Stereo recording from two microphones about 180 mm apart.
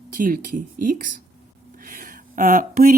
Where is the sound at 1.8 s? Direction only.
50° right (ahead or behind).